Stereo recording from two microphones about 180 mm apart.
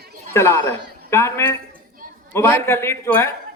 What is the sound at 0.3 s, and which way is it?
A man's voice, 15° left (ahead or behind).